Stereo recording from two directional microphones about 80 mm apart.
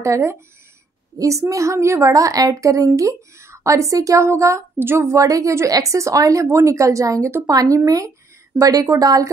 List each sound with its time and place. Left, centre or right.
0.0 s speech: right